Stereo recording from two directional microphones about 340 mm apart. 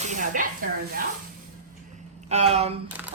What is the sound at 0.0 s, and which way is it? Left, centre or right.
Speech, right.